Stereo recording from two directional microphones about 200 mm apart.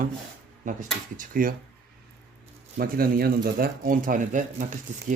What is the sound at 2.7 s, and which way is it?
Speech, 45° right (ahead or behind).